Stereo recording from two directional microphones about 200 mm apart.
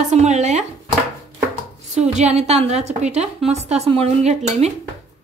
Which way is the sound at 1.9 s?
35° right (ahead or behind).